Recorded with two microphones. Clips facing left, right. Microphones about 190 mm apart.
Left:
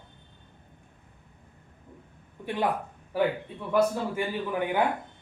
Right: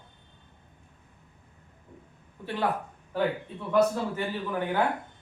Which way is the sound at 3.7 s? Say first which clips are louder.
Right 1 dB; 10° left (ahead or behind).